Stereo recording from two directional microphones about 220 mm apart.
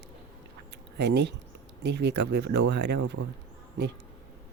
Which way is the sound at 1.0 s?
50° right (ahead or behind).